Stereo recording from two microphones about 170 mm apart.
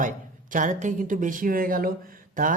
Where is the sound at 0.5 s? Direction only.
50° right (ahead or behind).